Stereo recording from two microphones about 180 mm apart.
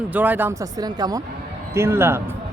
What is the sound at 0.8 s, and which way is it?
Speech, 20° right (ahead or behind).